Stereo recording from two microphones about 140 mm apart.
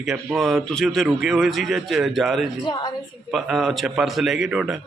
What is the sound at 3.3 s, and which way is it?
Speech, centre (ahead or behind).